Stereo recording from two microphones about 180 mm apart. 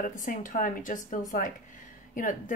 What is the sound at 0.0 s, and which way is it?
A woman's voice, 50° left (ahead or behind).